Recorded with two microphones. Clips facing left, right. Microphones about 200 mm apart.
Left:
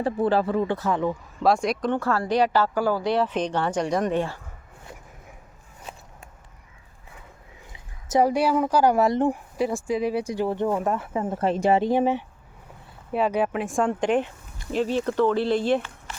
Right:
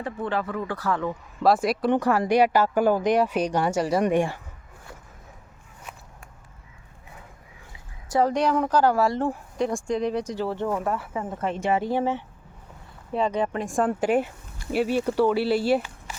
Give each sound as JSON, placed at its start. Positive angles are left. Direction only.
{"t": 0.0, "sound": "speech", "side_deg": 35}
{"t": 1.4, "sound": "speech", "side_deg": 0}
{"t": 1.9, "sound": "speech", "side_deg": -15}
{"t": 5.9, "sound": "biting", "side_deg": 30}
{"t": 7.7, "sound": "a sound", "side_deg": 20}
{"t": 8.3, "sound": "speech", "side_deg": 5}
{"t": 9.6, "sound": "speech", "side_deg": 5}
{"t": 11.8, "sound": "speech", "side_deg": 15}
{"t": 13.1, "sound": "speech", "side_deg": 5}